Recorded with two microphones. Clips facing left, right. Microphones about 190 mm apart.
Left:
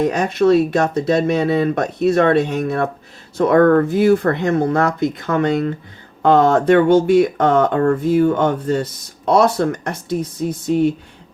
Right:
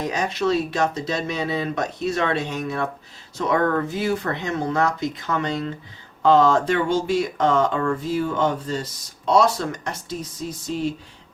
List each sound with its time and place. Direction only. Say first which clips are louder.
0.0 s speech: left 8 dB; 55° left (ahead or behind)